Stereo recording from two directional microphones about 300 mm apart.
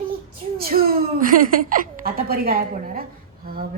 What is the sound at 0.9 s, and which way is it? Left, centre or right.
A woman's voice, right.